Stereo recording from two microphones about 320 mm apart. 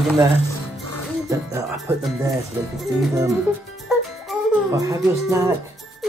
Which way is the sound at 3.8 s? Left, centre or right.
Centre.